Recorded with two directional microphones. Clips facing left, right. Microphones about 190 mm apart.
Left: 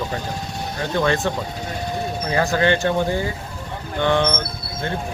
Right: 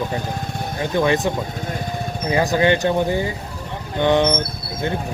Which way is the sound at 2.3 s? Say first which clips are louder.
Right 2 dB; 15° right (ahead or behind).